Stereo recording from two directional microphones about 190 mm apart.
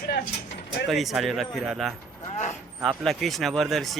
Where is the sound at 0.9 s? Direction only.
Centre (ahead or behind).